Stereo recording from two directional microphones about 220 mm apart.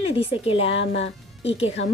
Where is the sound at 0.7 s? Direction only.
55° left (ahead or behind).